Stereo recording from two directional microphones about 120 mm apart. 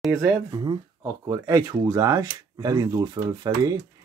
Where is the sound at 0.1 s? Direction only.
25° right (ahead or behind).